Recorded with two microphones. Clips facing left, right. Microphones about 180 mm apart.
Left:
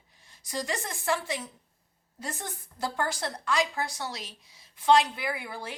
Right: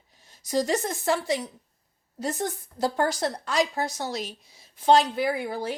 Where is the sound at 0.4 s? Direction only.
40° right (ahead or behind).